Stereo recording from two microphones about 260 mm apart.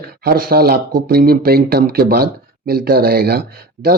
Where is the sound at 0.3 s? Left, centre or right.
Right.